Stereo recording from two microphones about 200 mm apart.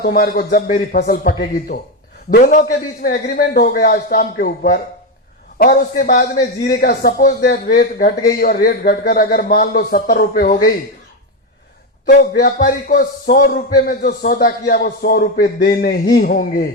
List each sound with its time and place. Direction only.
0.0 s a man's voice: 50° left (ahead or behind)
12.0 s a man's voice: 45° left (ahead or behind)